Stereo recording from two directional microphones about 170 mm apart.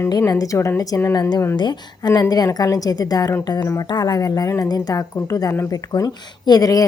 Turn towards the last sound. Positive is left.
turn(degrees=20)  # may be behind; listen again after turning